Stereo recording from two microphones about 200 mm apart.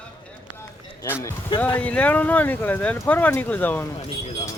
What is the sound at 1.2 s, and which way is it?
Speech, 15° left (ahead or behind).